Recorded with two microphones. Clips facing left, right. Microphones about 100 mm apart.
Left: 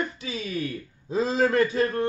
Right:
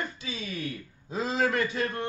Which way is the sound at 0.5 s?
35° left (ahead or behind).